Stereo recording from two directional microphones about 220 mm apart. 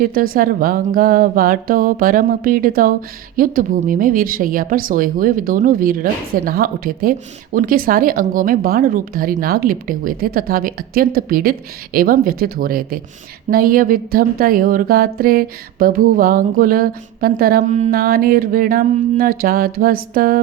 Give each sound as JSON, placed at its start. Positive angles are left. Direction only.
{"t": 0.0, "sound": "a woman's voice", "side_deg": -40}